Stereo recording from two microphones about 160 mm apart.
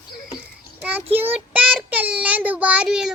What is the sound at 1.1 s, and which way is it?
Child singing, 10° right (ahead or behind).